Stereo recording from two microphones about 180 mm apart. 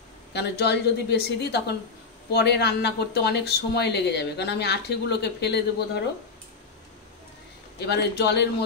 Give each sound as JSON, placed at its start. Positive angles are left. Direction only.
{"t": 0.3, "sound": "speech", "side_deg": 65}
{"t": 7.8, "sound": "speech", "side_deg": 70}